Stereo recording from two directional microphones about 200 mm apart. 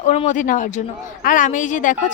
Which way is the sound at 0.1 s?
35° left (ahead or behind).